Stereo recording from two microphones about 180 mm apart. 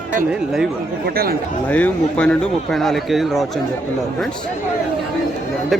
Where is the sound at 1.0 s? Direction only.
55° right (ahead or behind).